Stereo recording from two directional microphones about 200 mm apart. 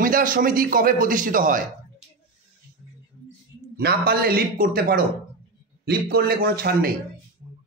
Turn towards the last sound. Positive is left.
turn(degrees=-50)  # may be behind; listen again after turning